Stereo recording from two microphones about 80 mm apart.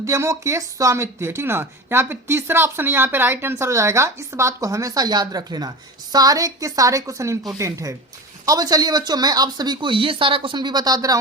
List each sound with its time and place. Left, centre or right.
0.0 s speech: right